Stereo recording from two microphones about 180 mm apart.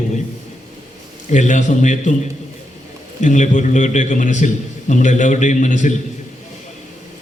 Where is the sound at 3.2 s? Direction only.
40° left (ahead or behind).